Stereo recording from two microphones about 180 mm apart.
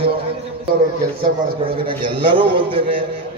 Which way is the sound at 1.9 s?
25° right (ahead or behind).